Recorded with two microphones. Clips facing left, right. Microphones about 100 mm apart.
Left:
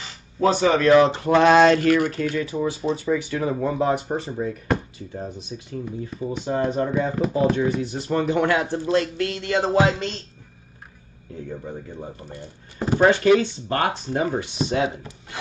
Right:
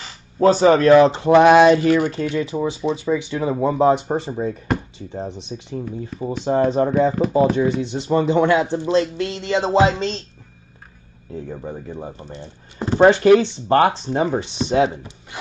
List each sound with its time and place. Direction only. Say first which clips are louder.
0.4 s speech: right 5 dB; 35° right (ahead or behind)
1.3 s mantra: right 4 dB; 15° right (ahead or behind)
1.9 s speech: right 2 dB; 20° right (ahead or behind); by 6.9 s 35° right (ahead or behind)
7.0 s speech: right 5 dB; 20° right (ahead or behind)
11.4 s speech: right 1 dB; 35° right (ahead or behind)
12.2 s speech: right 2 dB; 25° right (ahead or behind)